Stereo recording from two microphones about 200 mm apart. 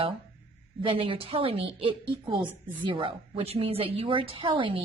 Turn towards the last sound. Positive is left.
turn(degrees=-25)  # may be behind; listen again after turning